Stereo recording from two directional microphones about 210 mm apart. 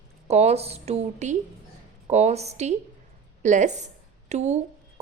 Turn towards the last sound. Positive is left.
turn(degrees=-30)  # may be behind; listen again after turning